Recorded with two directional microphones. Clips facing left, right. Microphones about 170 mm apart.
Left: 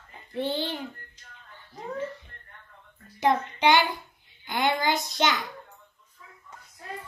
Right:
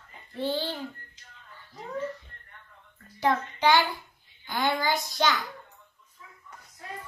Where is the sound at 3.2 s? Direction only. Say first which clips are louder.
Left 2 dB; 20° left (ahead or behind).